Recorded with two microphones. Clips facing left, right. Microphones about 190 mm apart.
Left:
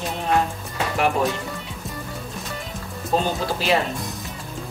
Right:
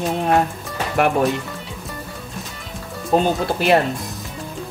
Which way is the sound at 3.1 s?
55° right (ahead or behind).